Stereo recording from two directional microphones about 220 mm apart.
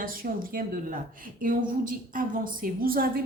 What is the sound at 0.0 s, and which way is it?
Speech, 40° right (ahead or behind).